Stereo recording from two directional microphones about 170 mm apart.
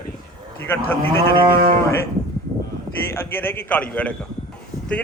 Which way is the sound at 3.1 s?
10° left (ahead or behind).